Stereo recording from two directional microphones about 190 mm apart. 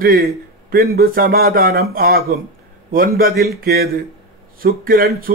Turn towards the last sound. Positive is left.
turn(degrees=-50)  # may be behind; listen again after turning